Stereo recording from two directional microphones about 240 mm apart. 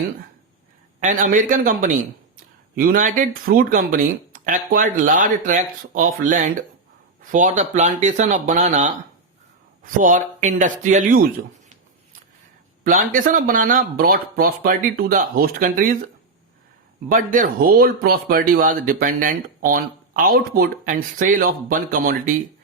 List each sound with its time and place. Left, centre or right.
0.9 s speech: right
12.8 s speech: right
17.1 s speech: right